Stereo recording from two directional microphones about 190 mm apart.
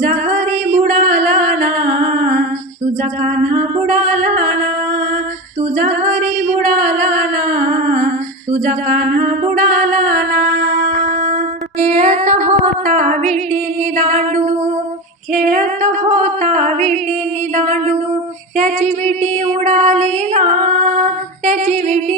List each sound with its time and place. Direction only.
0.0 s music: 45° right (ahead or behind)
5.7 s singing: 45° right (ahead or behind)
11.8 s female singing: 40° right (ahead or behind)
17.5 s music: 40° right (ahead or behind)